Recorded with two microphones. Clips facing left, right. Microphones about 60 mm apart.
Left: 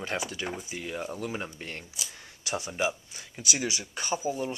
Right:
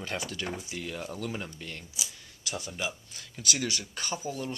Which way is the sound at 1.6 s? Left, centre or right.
Left.